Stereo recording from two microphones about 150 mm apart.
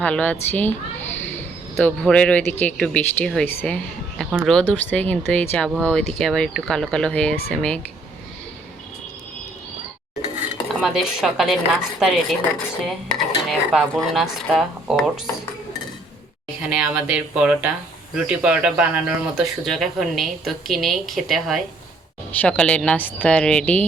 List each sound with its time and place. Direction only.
0.0 s speech: 10° left (ahead or behind)
10.4 s dishes: 5° right (ahead or behind)
11.9 s speech: centre (ahead or behind)
16.6 s speech: 5° right (ahead or behind)